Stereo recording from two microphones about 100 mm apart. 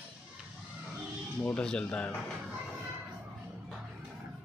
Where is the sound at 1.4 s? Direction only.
10° left (ahead or behind).